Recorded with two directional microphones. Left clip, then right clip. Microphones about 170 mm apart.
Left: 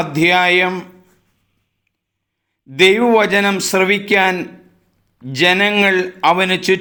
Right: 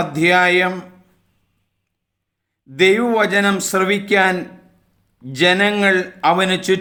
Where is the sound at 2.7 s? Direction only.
15° left (ahead or behind).